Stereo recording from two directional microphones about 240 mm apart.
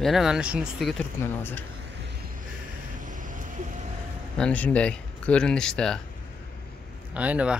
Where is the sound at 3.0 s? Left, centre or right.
Right.